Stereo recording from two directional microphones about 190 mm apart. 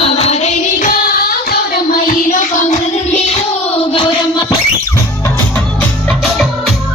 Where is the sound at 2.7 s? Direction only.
40° left (ahead or behind).